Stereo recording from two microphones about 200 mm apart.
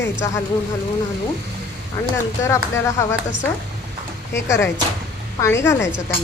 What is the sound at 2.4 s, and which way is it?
A woman's voice, 15° left (ahead or behind).